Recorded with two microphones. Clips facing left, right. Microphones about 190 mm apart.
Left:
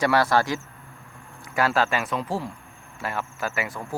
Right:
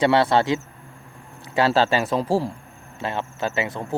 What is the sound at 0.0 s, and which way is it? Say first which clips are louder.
Speech: right 3 dB; 25° right (ahead or behind).